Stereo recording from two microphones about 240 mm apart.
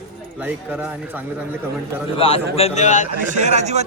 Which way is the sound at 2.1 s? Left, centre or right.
Left.